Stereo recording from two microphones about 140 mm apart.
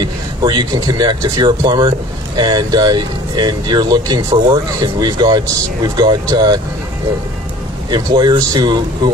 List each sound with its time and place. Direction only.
0.0 s speech: 35° right (ahead or behind)
7.9 s speech: 30° right (ahead or behind)